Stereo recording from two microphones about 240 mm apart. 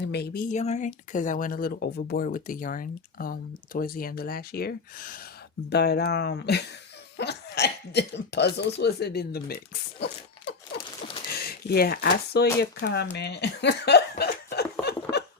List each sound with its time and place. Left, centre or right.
0.0 s speech: left
0.5 s speech: left
10.0 s a sound: left
11.3 s speech: left